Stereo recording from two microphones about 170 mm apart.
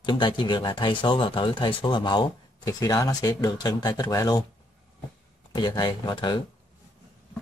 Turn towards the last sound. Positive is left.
turn(degrees=25)  # may be behind; listen again after turning